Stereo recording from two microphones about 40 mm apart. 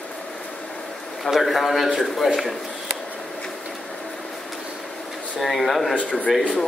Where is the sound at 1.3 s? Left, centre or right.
Centre.